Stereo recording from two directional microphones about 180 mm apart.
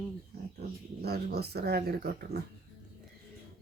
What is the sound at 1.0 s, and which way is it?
Speech, 60° right (ahead or behind).